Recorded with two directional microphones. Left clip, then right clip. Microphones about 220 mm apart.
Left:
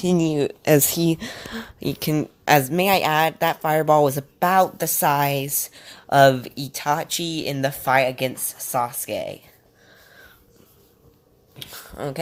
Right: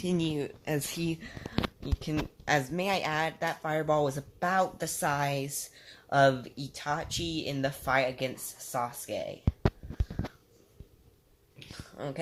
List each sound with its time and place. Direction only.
0.0 s a woman's voice: 35° left (ahead or behind)
0.9 s a woman's voice: 30° left (ahead or behind)
1.8 s a woman's voice: 45° left (ahead or behind); by 9.4 s 30° left (ahead or behind)
11.6 s a sound: 40° left (ahead or behind)